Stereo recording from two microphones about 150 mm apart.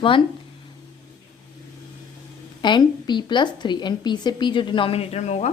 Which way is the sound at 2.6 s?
30° left (ahead or behind).